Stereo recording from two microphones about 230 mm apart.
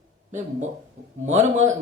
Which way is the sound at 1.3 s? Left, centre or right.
Right.